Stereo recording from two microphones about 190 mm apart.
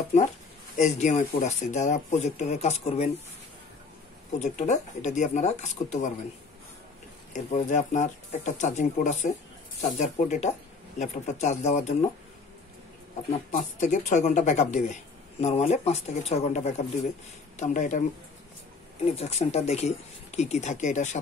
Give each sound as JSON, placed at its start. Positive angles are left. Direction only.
{"t": 0.7, "sound": "speech", "side_deg": 40}
{"t": 4.4, "sound": "speech", "side_deg": 40}
{"t": 7.3, "sound": "speech", "side_deg": 40}
{"t": 13.5, "sound": "speech", "side_deg": 40}
{"t": 19.0, "sound": "speech", "side_deg": 35}